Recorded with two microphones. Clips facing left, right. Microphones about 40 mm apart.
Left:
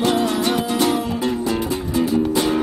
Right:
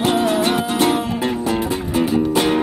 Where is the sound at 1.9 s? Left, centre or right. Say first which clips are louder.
Right 1 dB; right.